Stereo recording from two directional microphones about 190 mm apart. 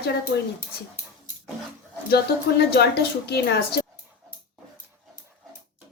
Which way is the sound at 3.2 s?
60° left (ahead or behind).